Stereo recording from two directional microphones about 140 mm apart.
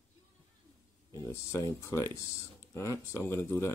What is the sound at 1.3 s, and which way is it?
Speech, 20° left (ahead or behind).